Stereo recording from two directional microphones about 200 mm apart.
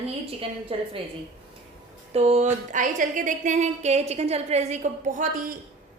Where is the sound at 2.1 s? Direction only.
35° right (ahead or behind).